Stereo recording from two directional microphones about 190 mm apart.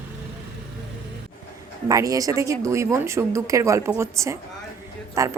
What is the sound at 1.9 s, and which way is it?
A woman's voice, 20° right (ahead or behind).